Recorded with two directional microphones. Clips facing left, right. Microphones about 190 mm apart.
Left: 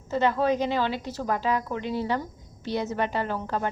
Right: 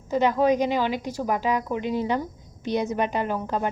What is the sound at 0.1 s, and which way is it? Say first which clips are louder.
A woman's voice: right 3 dB; 15° right (ahead or behind).